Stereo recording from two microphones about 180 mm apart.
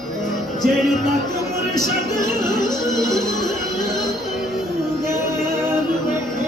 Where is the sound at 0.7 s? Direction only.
Centre (ahead or behind).